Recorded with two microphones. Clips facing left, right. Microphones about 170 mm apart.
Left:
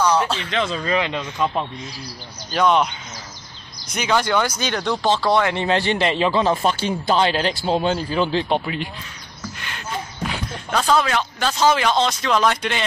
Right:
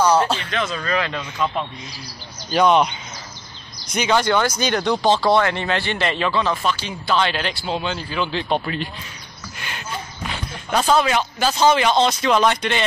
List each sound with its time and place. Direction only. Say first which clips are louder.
0.0 s a sound: right 2 dB; 5° right (ahead or behind)
0.4 s a man's voice: left 2 dB; 25° left (ahead or behind)
2.5 s a man's voice: right 2 dB; centre (ahead or behind)
3.9 s a man's voice: right 1 dB; centre (ahead or behind)
5.4 s speech: even; 15° left (ahead or behind)
5.7 s a man's voice: left 3 dB; 30° left (ahead or behind)
6.6 s a man's voice: left 3 dB; 40° left (ahead or behind)
8.5 s speech: even; 15° left (ahead or behind)
10.7 s a man's voice: right 1 dB; 10° right (ahead or behind)